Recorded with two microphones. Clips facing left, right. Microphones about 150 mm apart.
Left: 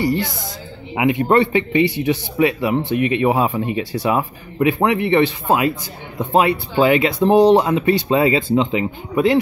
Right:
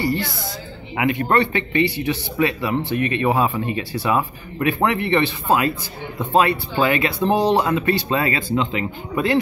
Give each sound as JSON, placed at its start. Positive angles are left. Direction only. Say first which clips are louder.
{"t": 0.0, "sound": "speech", "louder": "left 3 dB", "side_deg": 15}